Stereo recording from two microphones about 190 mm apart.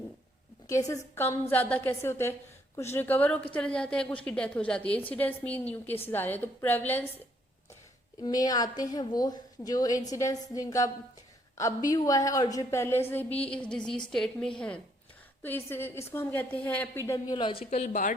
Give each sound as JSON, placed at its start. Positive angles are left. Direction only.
{"t": 0.7, "sound": "a woman's voice", "side_deg": 15}
{"t": 8.2, "sound": "a woman's voice", "side_deg": 20}
{"t": 17.1, "sound": "a woman's voice", "side_deg": 25}